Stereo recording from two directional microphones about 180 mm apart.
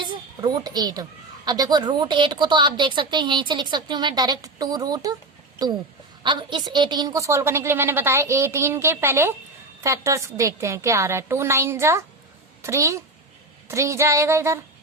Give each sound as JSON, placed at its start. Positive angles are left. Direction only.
{"t": 0.0, "sound": "a woman's voice", "side_deg": -20}
{"t": 6.2, "sound": "a woman's voice", "side_deg": -25}